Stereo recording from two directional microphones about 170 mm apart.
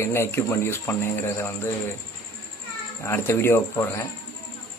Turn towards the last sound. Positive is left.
turn(degrees=15)  # may be behind; listen again after turning